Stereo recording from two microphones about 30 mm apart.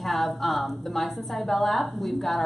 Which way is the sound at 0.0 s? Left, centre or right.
Centre.